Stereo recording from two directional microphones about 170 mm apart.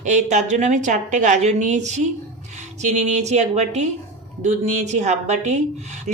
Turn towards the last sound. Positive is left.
turn(degrees=-40)  # may be behind; listen again after turning